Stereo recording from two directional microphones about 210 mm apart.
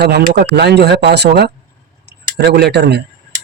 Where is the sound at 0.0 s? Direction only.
50° right (ahead or behind).